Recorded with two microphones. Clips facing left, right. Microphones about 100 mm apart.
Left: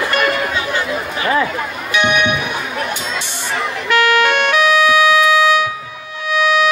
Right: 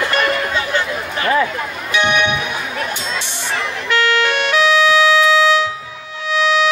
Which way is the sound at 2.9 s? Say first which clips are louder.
Left 1 dB; 15° left (ahead or behind).